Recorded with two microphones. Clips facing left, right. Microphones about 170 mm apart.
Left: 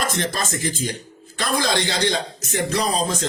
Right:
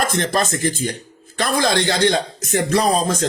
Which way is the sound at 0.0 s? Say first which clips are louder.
Right 5 dB; 55° right (ahead or behind).